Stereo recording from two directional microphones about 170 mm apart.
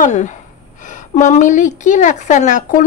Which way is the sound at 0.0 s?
45° left (ahead or behind).